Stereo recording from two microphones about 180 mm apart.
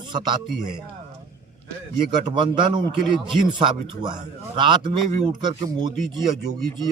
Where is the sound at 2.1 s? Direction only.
25° right (ahead or behind).